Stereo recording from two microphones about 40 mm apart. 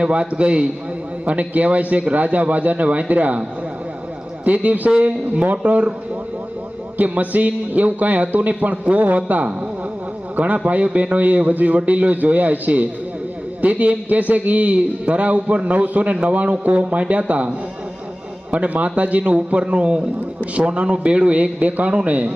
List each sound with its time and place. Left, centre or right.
0.0 s a man's voice: right
4.4 s a man's voice: right
6.9 s a man's voice: right
18.5 s a man's voice: right